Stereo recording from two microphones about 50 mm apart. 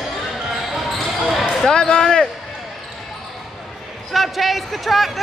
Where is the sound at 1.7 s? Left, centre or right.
Centre.